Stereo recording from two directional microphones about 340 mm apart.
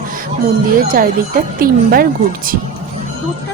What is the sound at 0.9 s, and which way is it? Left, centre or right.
Speech, right.